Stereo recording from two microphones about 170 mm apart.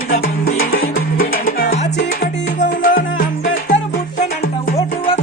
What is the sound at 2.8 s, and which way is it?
Music, 50° left (ahead or behind).